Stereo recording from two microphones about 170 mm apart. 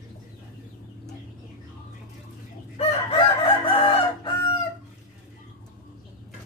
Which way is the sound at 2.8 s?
35° left (ahead or behind).